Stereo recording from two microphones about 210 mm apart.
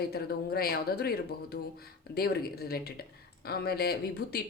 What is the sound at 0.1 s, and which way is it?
Speech, 45° left (ahead or behind).